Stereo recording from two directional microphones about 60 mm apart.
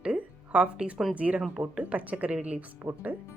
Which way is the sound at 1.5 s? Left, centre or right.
Centre.